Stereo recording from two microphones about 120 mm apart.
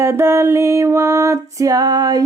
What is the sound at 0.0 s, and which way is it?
Music, 20° right (ahead or behind).